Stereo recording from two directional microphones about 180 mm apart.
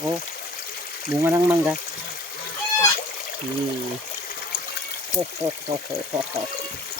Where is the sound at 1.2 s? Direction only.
10° right (ahead or behind).